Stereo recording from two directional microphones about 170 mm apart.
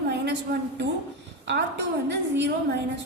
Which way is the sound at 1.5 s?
90° right.